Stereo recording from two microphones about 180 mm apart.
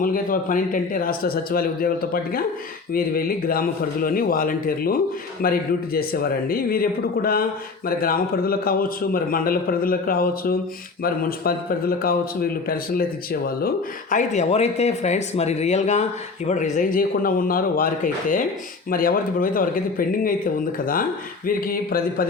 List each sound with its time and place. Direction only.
0.0 s a man's voice: 50° left (ahead or behind)